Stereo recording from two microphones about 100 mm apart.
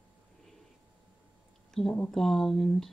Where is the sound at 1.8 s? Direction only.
5° left (ahead or behind).